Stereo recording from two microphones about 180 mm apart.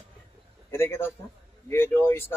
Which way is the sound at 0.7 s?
15° left (ahead or behind).